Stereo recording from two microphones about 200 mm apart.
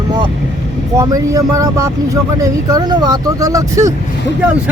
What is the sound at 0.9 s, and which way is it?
Speech, 15° right (ahead or behind).